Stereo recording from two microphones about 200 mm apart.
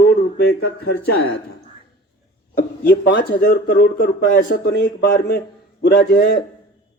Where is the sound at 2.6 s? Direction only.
60° left (ahead or behind).